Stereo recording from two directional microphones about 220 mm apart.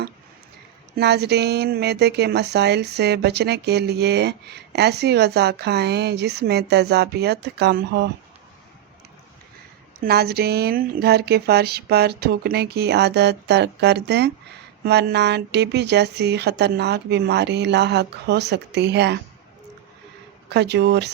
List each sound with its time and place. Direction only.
0.9 s speech: 50° right (ahead or behind)
10.0 s speech: 45° right (ahead or behind)
20.5 s speech: 50° right (ahead or behind)